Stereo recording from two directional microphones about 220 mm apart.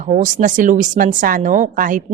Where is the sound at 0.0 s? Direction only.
35° right (ahead or behind).